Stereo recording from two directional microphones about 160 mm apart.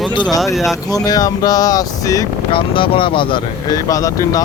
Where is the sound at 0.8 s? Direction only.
25° left (ahead or behind).